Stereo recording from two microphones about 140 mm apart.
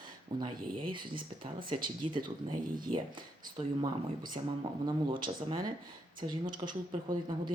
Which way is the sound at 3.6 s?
35° right (ahead or behind).